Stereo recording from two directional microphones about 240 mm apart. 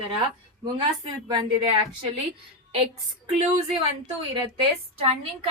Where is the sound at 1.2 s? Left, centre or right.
Centre.